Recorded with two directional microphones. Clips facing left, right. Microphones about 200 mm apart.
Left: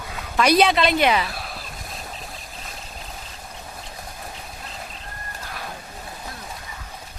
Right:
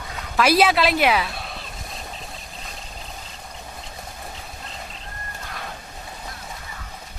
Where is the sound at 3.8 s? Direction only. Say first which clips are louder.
Even; centre (ahead or behind).